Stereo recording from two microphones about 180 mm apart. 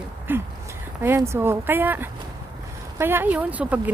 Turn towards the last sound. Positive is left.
turn(degrees=-10)  # may be behind; listen again after turning